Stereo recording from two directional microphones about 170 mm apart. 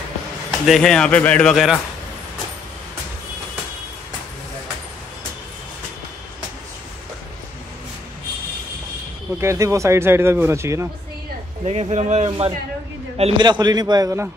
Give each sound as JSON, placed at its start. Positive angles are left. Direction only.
{"t": 0.5, "sound": "speech", "side_deg": 0}
{"t": 9.4, "sound": "speech", "side_deg": -15}
{"t": 11.6, "sound": "speech", "side_deg": -40}
{"t": 13.4, "sound": "a man's voice", "side_deg": -25}